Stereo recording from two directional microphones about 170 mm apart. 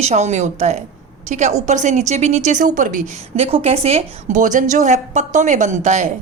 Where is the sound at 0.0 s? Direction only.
40° right (ahead or behind).